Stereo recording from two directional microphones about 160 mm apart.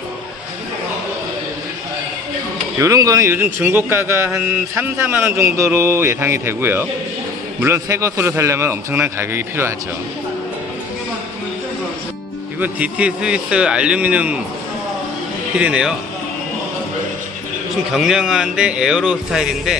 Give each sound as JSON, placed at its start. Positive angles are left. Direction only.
{"t": 2.8, "sound": "a man's voice", "side_deg": -20}
{"t": 12.5, "sound": "a man's voice", "side_deg": -10}
{"t": 15.5, "sound": "a man's voice", "side_deg": -5}
{"t": 17.9, "sound": "speech", "side_deg": -5}